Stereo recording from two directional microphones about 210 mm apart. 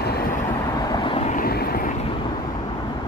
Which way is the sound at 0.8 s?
20° left (ahead or behind).